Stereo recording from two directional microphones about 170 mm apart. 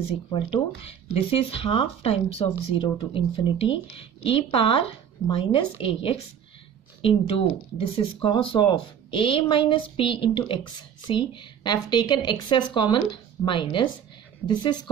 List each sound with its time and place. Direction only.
0.3 s a woman's voice: 30° left (ahead or behind)